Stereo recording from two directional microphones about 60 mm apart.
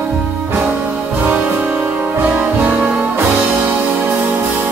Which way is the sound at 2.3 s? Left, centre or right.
Right.